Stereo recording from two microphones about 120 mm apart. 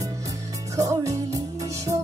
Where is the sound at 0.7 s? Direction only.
25° right (ahead or behind).